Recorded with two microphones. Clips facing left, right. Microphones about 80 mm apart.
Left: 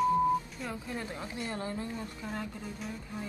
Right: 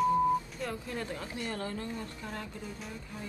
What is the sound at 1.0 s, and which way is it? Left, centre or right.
A woman's voice, centre.